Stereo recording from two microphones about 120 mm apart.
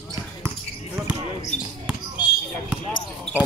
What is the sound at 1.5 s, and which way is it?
Basketball bounce, 10° left (ahead or behind).